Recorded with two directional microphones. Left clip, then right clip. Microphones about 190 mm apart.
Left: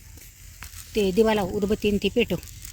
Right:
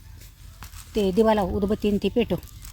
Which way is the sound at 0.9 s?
30° right (ahead or behind).